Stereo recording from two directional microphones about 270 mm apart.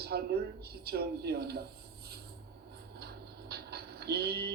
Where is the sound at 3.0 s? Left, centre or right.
Right.